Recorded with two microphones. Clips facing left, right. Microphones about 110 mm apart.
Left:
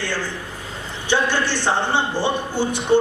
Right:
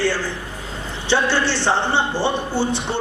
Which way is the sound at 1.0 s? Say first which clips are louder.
Right 1 dB; 15° left (ahead or behind).